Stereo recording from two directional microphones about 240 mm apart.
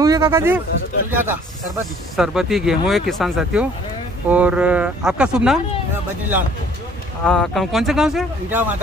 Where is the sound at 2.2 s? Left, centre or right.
Centre.